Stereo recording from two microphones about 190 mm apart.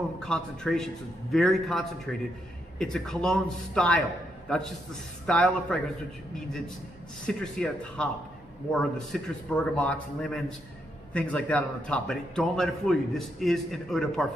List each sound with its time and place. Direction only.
0.2 s a man's voice: 5° left (ahead or behind)
7.2 s a man's voice: 5° left (ahead or behind)